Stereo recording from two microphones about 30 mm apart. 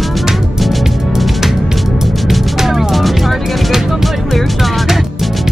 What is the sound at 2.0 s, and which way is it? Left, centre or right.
Music, centre.